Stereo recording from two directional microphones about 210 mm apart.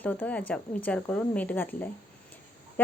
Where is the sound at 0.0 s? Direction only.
5° left (ahead or behind).